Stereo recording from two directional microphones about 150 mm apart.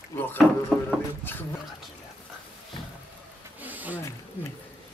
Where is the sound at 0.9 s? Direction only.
5° right (ahead or behind).